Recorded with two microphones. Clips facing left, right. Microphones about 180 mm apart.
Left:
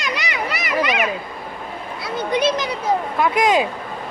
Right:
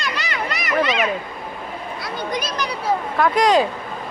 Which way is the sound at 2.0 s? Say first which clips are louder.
Left 8 dB; 25° left (ahead or behind).